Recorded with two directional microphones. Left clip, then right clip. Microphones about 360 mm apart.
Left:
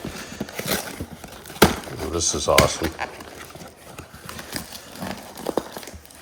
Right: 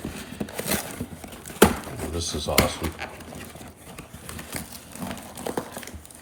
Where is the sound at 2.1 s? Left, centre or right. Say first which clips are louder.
Left 6 dB; left.